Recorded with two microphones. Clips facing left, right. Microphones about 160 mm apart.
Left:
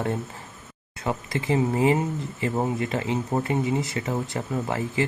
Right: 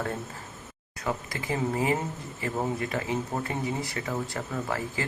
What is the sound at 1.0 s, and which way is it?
Speech, 25° left (ahead or behind).